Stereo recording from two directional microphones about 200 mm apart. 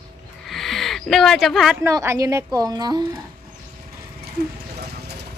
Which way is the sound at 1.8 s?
15° right (ahead or behind).